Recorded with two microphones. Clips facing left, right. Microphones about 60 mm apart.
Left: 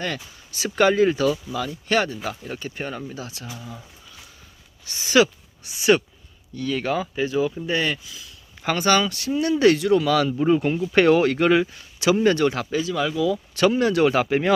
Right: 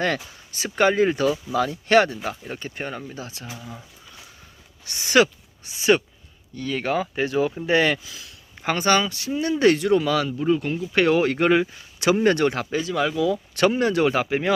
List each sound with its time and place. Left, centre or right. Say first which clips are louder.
0.5 s speech: left 1 dB; right
1.5 s speech: right 5 dB; right
2.6 s speech: left 1 dB; right
4.9 s speech: even; right
7.2 s speech: even; right
7.7 s speech: right 4 dB; right
8.6 s speech: left 1 dB; right
10.3 s speech: left 3 dB; left
10.9 s speech: left 3 dB; centre
11.2 s speech: left 1 dB; right
11.9 s speech: even; right
13.7 s speech: left 1 dB; right
14.0 s speech: left 2 dB; centre